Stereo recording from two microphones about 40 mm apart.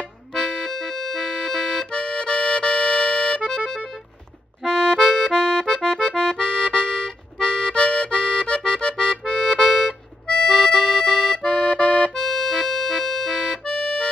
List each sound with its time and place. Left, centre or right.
0.3 s accordion: centre
11.3 s accordion: left